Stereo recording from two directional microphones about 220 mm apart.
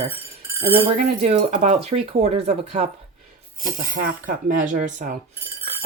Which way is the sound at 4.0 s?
35° right (ahead or behind).